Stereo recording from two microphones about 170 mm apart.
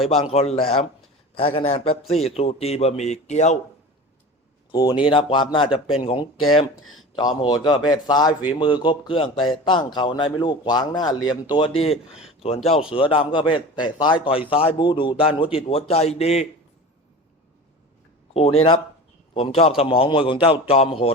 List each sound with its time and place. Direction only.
0.1 s a man's voice: 35° left (ahead or behind)
4.7 s a man's voice: 25° left (ahead or behind)
18.3 s a man's voice: 35° left (ahead or behind)